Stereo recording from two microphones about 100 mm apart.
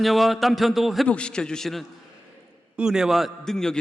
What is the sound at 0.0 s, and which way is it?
A man's voice, centre (ahead or behind).